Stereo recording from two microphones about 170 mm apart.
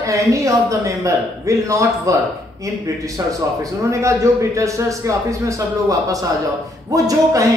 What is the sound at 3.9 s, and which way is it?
A man's voice, 15° right (ahead or behind).